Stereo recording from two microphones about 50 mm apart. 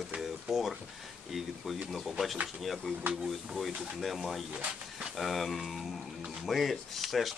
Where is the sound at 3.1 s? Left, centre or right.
Centre.